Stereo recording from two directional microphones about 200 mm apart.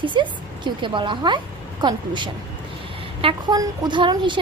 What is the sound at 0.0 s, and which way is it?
A woman's voice, 25° right (ahead or behind).